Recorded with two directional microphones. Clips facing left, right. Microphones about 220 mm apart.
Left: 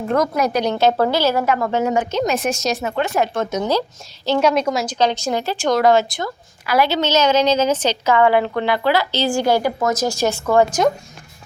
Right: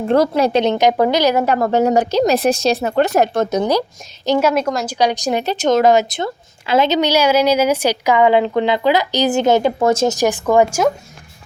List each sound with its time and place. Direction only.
0.1 s a woman's voice: 30° right (ahead or behind)
1.5 s speech: 40° right (ahead or behind)
3.6 s a woman's voice: 15° right (ahead or behind)
4.9 s a woman's voice: 15° right (ahead or behind)
10.2 s a woman's voice: 15° right (ahead or behind)